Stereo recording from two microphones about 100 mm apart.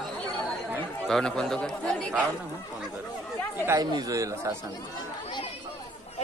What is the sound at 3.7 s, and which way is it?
Speech, 40° right (ahead or behind).